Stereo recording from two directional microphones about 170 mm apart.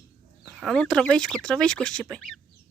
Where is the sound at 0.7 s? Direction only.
5° left (ahead or behind).